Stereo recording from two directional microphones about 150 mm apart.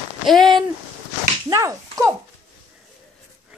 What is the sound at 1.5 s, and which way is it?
Speech, 20° right (ahead or behind).